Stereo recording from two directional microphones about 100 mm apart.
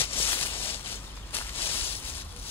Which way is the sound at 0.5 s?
65° left (ahead or behind).